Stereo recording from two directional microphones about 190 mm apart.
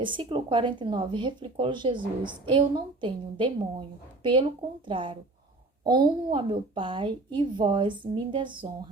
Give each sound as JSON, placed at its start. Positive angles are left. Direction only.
{"t": 0.0, "sound": "a woman's voice", "side_deg": -25}